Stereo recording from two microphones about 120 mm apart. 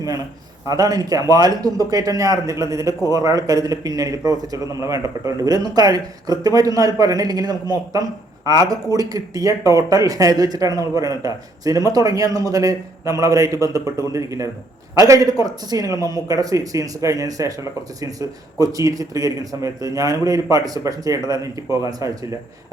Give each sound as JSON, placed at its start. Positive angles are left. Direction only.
{"t": 0.7, "sound": "a man's voice", "side_deg": -30}